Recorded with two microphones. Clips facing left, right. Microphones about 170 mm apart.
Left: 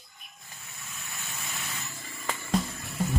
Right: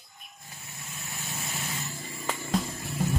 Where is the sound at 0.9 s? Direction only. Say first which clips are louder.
Right 4 dB; 20° right (ahead or behind).